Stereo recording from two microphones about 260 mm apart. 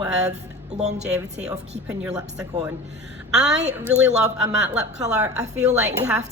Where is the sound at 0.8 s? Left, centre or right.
Right.